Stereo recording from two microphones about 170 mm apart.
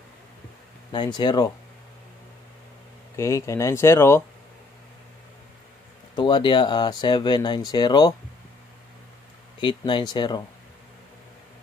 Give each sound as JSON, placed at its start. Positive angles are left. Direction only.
{"t": 0.9, "sound": "speech", "side_deg": 25}
{"t": 3.2, "sound": "speech", "side_deg": 15}
{"t": 6.1, "sound": "speech", "side_deg": 30}
{"t": 9.6, "sound": "speech", "side_deg": 30}